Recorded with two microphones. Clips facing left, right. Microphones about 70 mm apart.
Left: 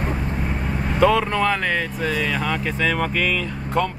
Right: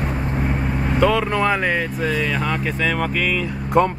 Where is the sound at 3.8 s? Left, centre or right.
Right.